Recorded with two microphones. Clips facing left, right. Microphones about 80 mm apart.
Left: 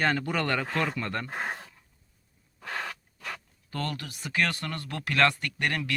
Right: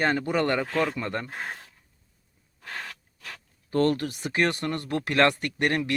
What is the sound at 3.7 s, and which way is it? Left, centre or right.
Speech, right.